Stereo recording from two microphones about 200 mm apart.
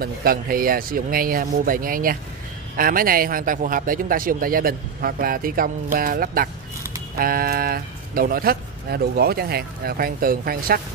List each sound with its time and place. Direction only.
0.0 s a man's voice: 50° right (ahead or behind)